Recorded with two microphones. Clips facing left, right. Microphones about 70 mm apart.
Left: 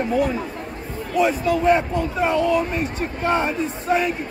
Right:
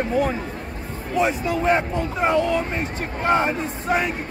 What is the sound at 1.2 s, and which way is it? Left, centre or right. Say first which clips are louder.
Speech: left 3 dB; right.